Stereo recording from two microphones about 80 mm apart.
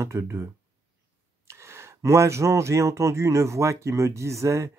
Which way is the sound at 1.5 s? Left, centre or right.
Right.